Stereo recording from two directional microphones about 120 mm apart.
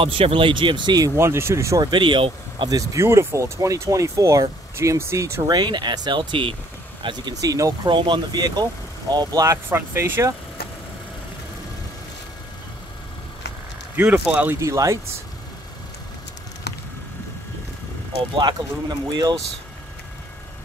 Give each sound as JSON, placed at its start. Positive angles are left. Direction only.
{"t": 0.0, "sound": "speech", "side_deg": -50}
{"t": 1.1, "sound": "speech", "side_deg": -20}
{"t": 1.9, "sound": "speech", "side_deg": -45}
{"t": 2.7, "sound": "speech", "side_deg": -30}
{"t": 13.9, "sound": "speech", "side_deg": -10}
{"t": 14.6, "sound": "speech", "side_deg": -25}
{"t": 18.3, "sound": "speech", "side_deg": -40}